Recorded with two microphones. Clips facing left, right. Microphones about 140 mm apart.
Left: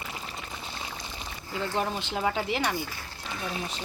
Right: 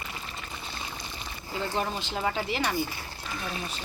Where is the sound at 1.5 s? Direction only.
15° right (ahead or behind).